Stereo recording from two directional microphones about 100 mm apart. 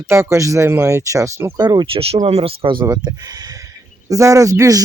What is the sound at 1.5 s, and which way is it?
Speech, 45° right (ahead or behind).